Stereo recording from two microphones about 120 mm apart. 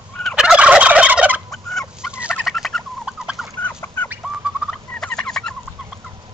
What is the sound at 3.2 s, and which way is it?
Fowl, centre (ahead or behind).